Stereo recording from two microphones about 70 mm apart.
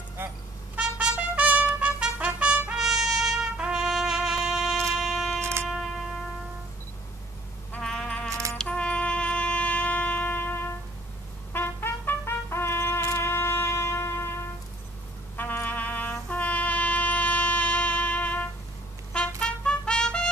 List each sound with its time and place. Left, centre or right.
0.2 s music: right
0.7 s trumpet: centre
2.8 s trumpet: centre
4.9 s music: centre
5.4 s music: right
7.8 s music: centre
8.3 s keys jangling: right
8.6 s wind instrument: centre
11.5 s brass instrument: left
13.0 s a sound: left
13.3 s music: left
15.3 s trumpet: left; by 20.2 s centre